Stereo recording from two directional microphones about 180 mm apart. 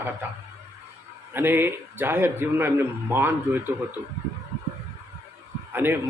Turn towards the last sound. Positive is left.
turn(degrees=-10)  # may be behind; listen again after turning